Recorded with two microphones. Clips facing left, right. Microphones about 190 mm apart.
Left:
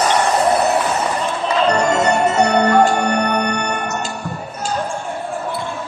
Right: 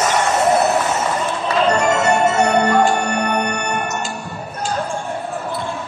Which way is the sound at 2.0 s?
35° left (ahead or behind).